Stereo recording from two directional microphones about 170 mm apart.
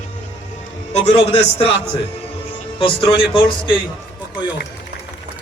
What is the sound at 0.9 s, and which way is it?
Speech, 40° left (ahead or behind).